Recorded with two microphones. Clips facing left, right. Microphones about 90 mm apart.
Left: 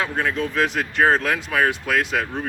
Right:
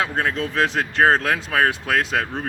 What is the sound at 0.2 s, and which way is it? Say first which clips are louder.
Speech: left 1 dB; 35° right (ahead or behind).